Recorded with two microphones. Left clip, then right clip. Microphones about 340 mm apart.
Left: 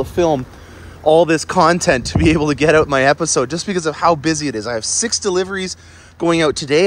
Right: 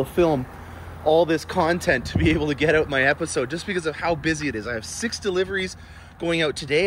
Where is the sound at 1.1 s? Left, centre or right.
Left.